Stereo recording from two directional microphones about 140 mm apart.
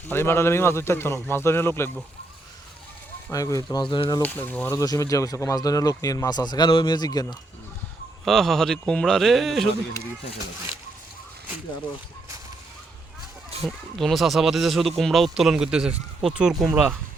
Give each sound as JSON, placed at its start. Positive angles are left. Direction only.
{"t": 0.1, "sound": "a man's voice", "side_deg": 15}
{"t": 3.3, "sound": "speech", "side_deg": 25}
{"t": 4.2, "sound": "a man's voice", "side_deg": 15}
{"t": 4.7, "sound": "speech", "side_deg": 25}
{"t": 8.2, "sound": "speech", "side_deg": 0}
{"t": 13.7, "sound": "speech", "side_deg": 0}